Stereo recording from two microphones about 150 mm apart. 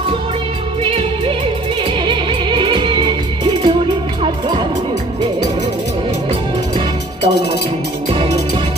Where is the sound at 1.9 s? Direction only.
30° right (ahead or behind).